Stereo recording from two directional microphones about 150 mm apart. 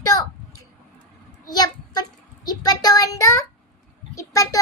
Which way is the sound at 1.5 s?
25° left (ahead or behind).